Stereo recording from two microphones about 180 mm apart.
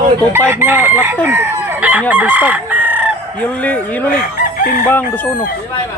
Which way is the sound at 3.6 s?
10° left (ahead or behind).